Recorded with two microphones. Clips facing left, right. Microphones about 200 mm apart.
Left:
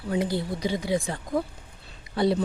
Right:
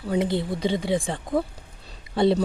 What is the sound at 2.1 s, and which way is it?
Speech, 25° right (ahead or behind).